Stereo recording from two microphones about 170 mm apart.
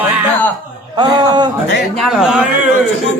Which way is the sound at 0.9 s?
25° right (ahead or behind).